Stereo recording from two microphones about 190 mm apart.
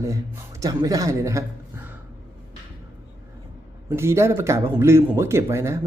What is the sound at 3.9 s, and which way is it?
Speech, 15° right (ahead or behind).